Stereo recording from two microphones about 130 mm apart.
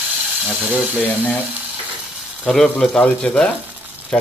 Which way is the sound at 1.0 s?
15° left (ahead or behind).